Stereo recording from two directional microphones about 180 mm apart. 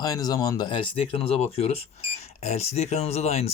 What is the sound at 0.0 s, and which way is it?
Speech, 20° left (ahead or behind).